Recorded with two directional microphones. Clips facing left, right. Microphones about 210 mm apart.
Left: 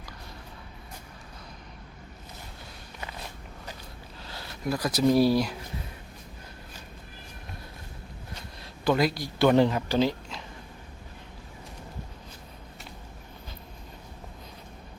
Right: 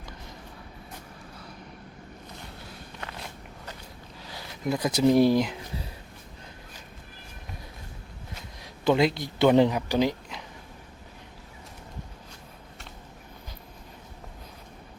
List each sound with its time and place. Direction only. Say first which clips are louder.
4.2 s speech: right 1 dB; 15° right (ahead or behind)
8.6 s speech: right 2 dB; 20° right (ahead or behind)